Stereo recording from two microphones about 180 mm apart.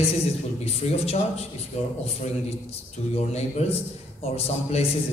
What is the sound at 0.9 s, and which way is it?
Speech, 35° left (ahead or behind).